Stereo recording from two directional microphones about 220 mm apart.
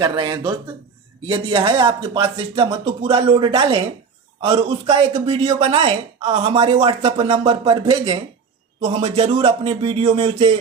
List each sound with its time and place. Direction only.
0.0 s a man's voice: 20° right (ahead or behind)